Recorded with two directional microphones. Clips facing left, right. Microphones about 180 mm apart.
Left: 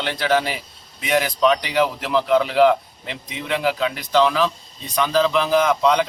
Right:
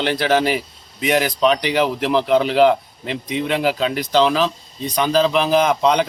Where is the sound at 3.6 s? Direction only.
35° right (ahead or behind).